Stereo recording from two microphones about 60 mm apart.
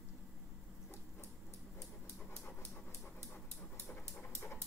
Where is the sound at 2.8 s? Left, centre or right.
Left.